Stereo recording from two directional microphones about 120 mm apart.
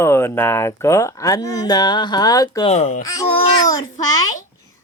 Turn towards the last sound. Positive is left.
turn(degrees=30)  # may be behind; listen again after turning